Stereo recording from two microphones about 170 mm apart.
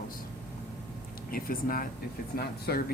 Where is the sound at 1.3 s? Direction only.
60° left (ahead or behind).